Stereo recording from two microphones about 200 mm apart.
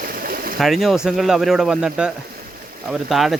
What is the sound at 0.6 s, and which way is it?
Speech, centre (ahead or behind).